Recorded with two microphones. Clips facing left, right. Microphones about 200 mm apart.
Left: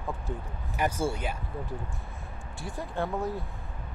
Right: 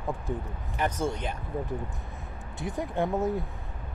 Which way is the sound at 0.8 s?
10° left (ahead or behind).